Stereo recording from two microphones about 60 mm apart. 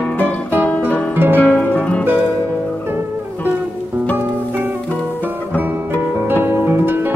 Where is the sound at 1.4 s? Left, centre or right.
Left.